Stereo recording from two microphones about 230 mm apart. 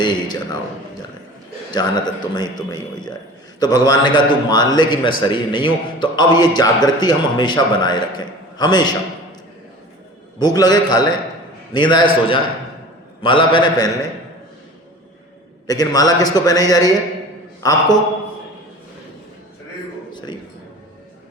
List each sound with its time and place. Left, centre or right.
0.0 s a man's voice: centre
1.7 s a man's voice: centre
10.4 s a man's voice: centre
15.6 s a man's voice: centre
20.1 s a sound: centre